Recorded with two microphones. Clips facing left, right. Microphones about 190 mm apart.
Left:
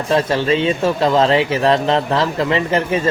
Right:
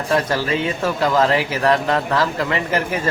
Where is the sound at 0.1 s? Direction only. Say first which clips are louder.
Left 4 dB; 25° left (ahead or behind).